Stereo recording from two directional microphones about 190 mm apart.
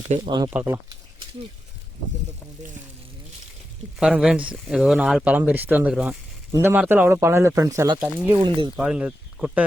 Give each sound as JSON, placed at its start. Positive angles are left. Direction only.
{"t": 0.3, "sound": "speech", "side_deg": -25}
{"t": 0.5, "sound": "speech", "side_deg": -15}
{"t": 4.0, "sound": "speech", "side_deg": -5}
{"t": 8.4, "sound": "speech", "side_deg": -25}
{"t": 8.7, "sound": "speech", "side_deg": -5}